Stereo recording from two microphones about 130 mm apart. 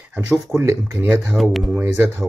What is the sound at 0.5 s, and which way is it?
Speech, 15° right (ahead or behind).